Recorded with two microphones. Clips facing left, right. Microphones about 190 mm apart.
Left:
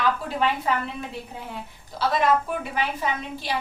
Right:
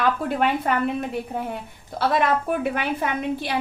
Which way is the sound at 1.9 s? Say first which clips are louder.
Right 1 dB; 55° right (ahead or behind).